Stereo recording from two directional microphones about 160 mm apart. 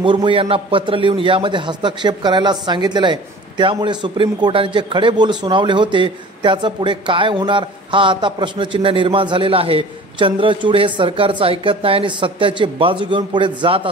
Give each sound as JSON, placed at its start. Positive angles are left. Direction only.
{"t": 0.0, "sound": "a man's voice", "side_deg": -30}